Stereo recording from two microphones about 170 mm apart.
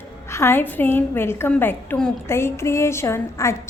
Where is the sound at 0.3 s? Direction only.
15° left (ahead or behind).